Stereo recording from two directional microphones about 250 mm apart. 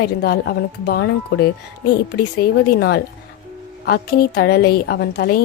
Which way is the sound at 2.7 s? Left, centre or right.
Left.